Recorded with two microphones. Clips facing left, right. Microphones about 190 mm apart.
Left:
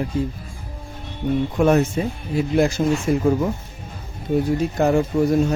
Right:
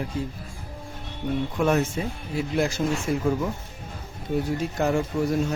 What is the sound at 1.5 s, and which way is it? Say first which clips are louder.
Speech: left 6 dB; 45° left (ahead or behind).